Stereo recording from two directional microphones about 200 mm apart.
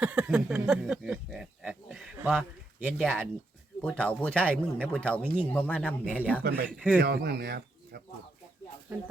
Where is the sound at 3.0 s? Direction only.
5° left (ahead or behind).